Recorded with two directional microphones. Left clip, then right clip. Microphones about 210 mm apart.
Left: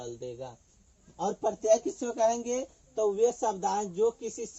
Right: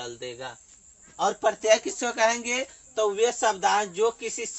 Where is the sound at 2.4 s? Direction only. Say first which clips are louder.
Right 4 dB; 60° right (ahead or behind).